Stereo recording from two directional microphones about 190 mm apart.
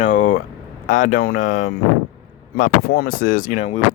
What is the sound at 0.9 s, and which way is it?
Speech, 45° left (ahead or behind).